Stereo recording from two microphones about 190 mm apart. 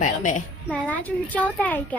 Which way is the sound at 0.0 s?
40° left (ahead or behind).